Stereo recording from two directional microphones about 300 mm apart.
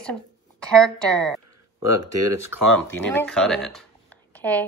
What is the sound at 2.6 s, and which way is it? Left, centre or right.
Speech, centre.